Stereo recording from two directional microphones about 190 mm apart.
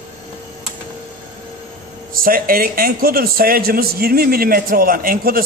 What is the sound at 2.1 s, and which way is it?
A man's voice, 50° right (ahead or behind).